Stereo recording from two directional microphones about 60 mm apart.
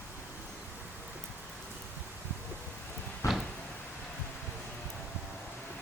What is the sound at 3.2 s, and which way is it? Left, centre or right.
Cupboard open or close, left.